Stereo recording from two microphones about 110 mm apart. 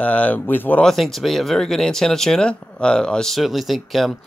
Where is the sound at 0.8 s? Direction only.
Centre (ahead or behind).